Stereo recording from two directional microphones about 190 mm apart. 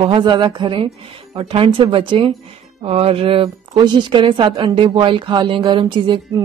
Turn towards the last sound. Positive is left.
turn(degrees=-25)  # may be behind; listen again after turning